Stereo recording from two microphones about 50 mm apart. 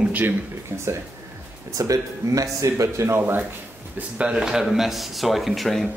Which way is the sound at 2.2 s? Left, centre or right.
Right.